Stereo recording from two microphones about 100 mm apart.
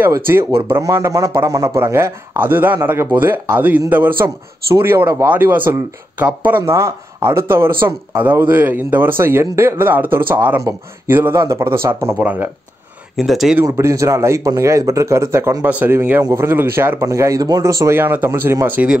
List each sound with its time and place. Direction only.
0.7 s speech: 30° right (ahead or behind)
13.1 s speech: centre (ahead or behind)
13.7 s speech: 30° right (ahead or behind)